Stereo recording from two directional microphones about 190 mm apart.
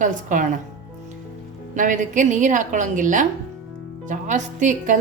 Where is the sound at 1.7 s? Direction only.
45° right (ahead or behind).